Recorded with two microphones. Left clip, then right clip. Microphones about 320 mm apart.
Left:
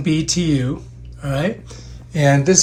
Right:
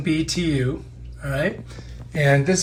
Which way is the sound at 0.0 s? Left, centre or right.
Centre.